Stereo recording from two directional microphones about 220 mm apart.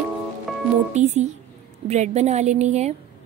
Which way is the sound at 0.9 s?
30° right (ahead or behind).